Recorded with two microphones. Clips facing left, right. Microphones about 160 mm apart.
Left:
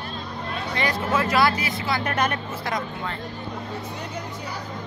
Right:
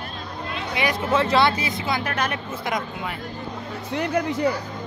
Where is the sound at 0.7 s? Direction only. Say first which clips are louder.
Right 2 dB; 15° right (ahead or behind).